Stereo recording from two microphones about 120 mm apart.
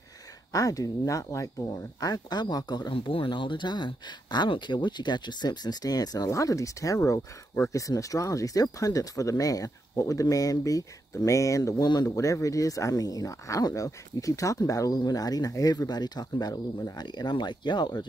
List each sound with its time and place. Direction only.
0.5 s speech: 30° left (ahead or behind)